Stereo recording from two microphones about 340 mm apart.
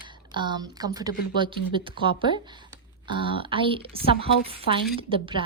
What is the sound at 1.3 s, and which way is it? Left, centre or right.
A woman's voice, centre.